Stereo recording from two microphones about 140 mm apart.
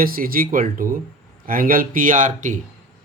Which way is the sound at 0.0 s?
90° right.